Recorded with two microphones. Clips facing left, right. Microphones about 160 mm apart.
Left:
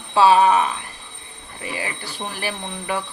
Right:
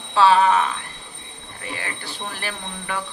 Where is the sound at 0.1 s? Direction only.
15° left (ahead or behind).